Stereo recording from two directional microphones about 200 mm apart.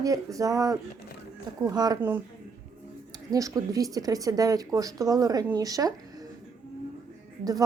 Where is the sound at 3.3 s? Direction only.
15° right (ahead or behind).